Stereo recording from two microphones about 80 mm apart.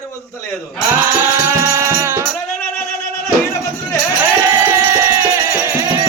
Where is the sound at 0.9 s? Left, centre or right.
Right.